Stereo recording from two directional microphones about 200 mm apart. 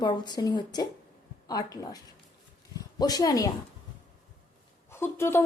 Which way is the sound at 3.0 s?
20° left (ahead or behind).